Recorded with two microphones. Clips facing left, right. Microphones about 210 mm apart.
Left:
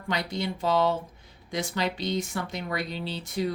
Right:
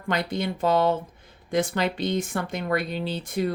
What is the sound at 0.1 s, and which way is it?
Speech, 55° right (ahead or behind).